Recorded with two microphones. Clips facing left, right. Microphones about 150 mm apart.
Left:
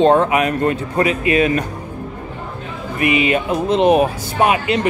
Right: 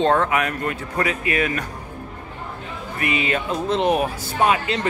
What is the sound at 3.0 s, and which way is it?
Speech, 15° left (ahead or behind).